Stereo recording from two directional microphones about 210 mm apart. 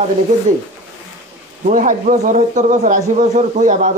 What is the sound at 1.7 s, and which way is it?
Speech, 40° right (ahead or behind).